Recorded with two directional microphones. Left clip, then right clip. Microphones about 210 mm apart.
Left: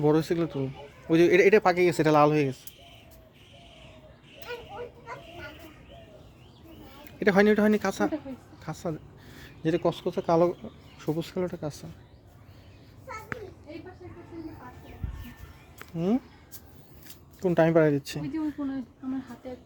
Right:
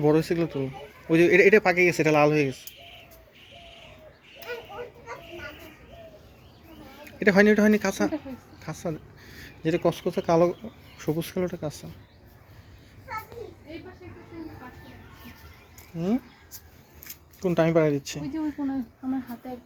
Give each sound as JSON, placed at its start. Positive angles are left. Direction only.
{"t": 0.0, "sound": "speech", "side_deg": 10}
{"t": 7.2, "sound": "speech", "side_deg": 10}
{"t": 8.6, "sound": "a sound", "side_deg": 10}
{"t": 9.8, "sound": "speech", "side_deg": 0}
{"t": 16.0, "sound": "a sound", "side_deg": 30}
{"t": 17.4, "sound": "speech", "side_deg": 15}